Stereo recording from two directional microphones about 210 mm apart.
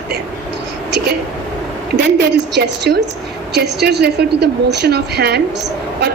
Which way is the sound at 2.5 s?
55° right (ahead or behind).